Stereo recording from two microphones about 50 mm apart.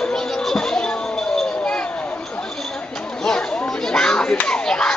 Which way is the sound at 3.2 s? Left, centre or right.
Centre.